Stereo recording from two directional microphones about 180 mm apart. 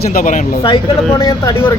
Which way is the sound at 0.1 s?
50° left (ahead or behind).